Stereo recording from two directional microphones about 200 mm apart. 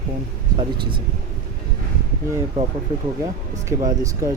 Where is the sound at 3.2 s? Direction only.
15° right (ahead or behind).